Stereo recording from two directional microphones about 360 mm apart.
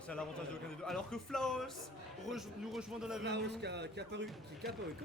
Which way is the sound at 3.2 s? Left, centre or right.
Right.